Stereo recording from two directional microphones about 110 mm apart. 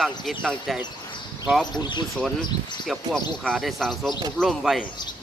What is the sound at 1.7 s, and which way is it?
Speech, 40° left (ahead or behind).